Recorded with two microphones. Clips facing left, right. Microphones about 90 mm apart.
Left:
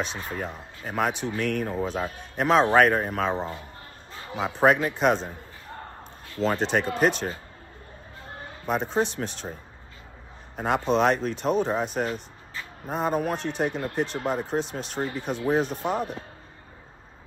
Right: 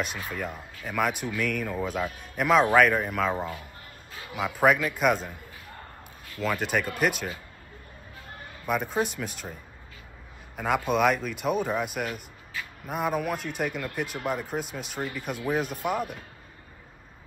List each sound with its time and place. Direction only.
0.1 s a man's voice: 30° left (ahead or behind)
8.5 s a sound: 30° left (ahead or behind)
9.0 s speech: 5° right (ahead or behind)
10.9 s a man's voice: 30° left (ahead or behind)